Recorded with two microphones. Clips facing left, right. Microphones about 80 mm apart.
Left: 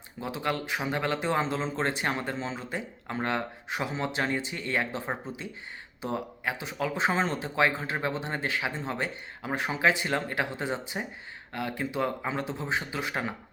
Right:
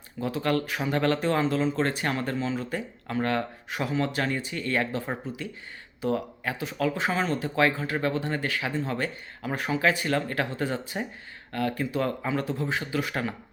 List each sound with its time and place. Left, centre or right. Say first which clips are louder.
0.2 s speech: right 4 dB; left